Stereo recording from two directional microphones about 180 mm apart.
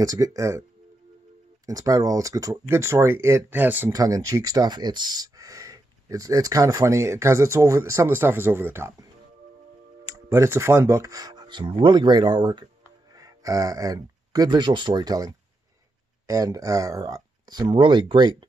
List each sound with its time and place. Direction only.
0.0 s speech: 20° right (ahead or behind)
1.7 s speech: 20° right (ahead or behind)